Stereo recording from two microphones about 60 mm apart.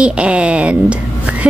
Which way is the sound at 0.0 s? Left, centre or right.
Centre.